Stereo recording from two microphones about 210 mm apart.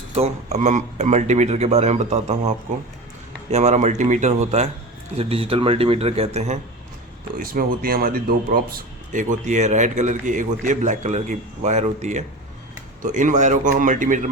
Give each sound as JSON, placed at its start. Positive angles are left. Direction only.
{"t": 0.1, "sound": "a man's voice", "side_deg": -30}
{"t": 7.3, "sound": "speech", "side_deg": -45}